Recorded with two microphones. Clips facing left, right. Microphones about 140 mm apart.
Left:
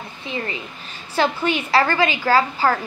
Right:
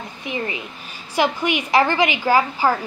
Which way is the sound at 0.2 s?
15° right (ahead or behind).